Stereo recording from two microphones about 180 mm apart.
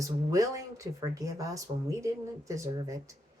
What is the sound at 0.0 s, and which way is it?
Speech, 15° right (ahead or behind).